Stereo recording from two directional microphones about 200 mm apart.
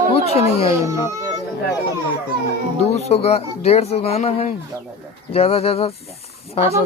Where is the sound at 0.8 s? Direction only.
15° right (ahead or behind).